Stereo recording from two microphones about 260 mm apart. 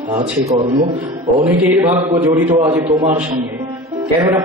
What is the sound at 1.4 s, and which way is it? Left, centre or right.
A man's voice, centre.